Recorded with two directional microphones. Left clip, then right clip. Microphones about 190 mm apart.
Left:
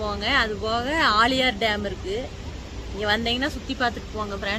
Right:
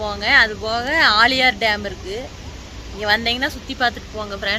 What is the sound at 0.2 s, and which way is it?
Speech, 15° left (ahead or behind).